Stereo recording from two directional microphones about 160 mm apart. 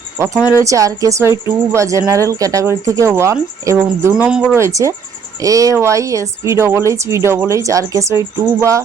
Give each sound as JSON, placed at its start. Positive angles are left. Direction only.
{"t": 0.6, "sound": "speech", "side_deg": -20}
{"t": 4.1, "sound": "speech", "side_deg": -5}
{"t": 4.5, "sound": "speech", "side_deg": -20}